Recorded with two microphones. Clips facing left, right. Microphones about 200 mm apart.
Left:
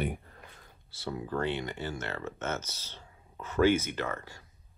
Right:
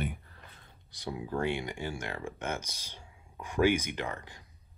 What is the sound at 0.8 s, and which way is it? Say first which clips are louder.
Speech: left 1 dB; 15° right (ahead or behind).